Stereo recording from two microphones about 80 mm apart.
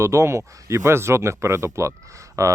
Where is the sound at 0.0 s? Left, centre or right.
Right.